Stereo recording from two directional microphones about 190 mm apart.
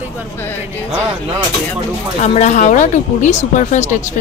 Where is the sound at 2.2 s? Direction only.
40° left (ahead or behind).